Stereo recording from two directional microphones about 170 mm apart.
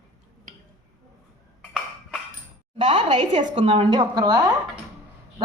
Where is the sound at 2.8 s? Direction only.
30° right (ahead or behind).